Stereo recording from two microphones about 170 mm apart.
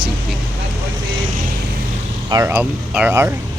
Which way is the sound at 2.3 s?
20° right (ahead or behind).